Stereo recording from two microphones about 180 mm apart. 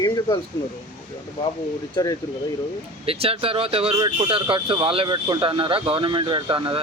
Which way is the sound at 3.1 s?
30° right (ahead or behind).